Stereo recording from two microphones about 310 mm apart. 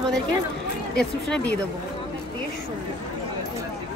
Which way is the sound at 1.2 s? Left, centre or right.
Centre.